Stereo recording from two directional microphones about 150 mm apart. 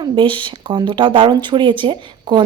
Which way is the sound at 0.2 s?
35° right (ahead or behind).